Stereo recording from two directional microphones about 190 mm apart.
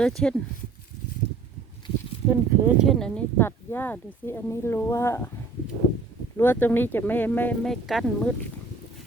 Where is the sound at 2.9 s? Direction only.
5° left (ahead or behind).